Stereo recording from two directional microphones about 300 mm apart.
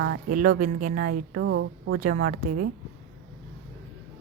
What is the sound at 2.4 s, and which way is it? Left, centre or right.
Speech, right.